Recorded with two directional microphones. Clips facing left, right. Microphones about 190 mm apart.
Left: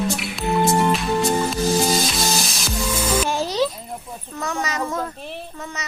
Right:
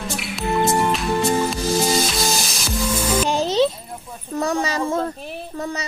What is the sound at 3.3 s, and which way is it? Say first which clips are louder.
Music: right 3 dB; 20° right (ahead or behind).